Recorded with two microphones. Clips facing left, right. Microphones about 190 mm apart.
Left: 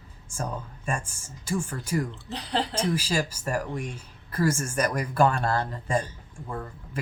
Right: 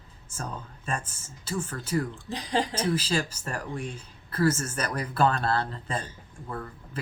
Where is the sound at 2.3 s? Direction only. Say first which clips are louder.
Right 2 dB; 15° right (ahead or behind).